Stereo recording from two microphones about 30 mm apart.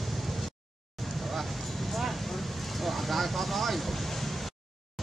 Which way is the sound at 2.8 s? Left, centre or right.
Centre.